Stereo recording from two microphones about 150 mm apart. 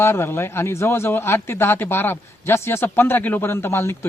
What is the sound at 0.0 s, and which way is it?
Speech, 15° left (ahead or behind).